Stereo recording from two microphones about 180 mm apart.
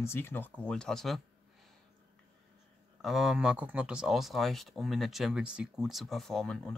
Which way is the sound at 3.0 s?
Centre (ahead or behind).